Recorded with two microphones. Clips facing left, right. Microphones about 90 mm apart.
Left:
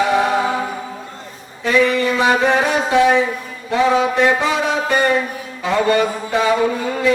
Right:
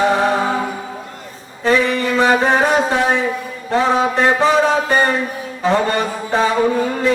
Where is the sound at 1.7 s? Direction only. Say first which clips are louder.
Even; 35° right (ahead or behind).